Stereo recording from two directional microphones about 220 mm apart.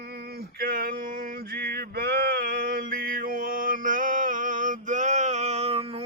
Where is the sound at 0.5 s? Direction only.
40° right (ahead or behind).